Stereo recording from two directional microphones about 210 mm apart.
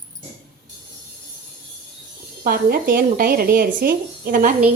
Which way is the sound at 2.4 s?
40° right (ahead or behind).